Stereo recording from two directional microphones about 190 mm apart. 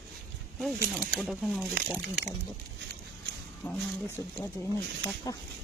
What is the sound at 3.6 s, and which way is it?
Speech, 5° left (ahead or behind).